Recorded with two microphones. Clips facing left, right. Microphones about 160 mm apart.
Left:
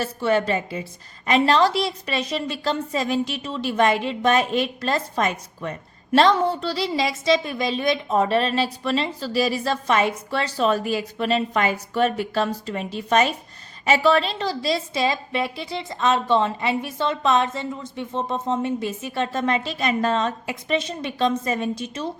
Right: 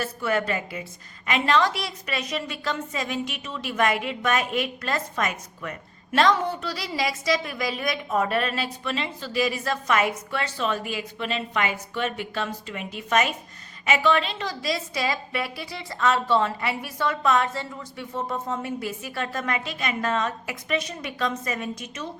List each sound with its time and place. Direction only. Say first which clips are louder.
0.0 s a woman's voice: left 4 dB; 30° left (ahead or behind)